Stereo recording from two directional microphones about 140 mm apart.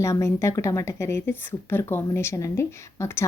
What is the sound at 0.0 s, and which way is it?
A woman's voice, 20° left (ahead or behind).